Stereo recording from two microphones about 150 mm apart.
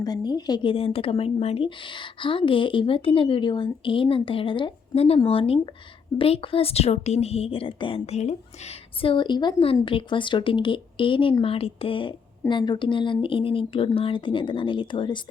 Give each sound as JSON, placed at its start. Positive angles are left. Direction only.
{"t": 0.0, "sound": "speech", "side_deg": 30}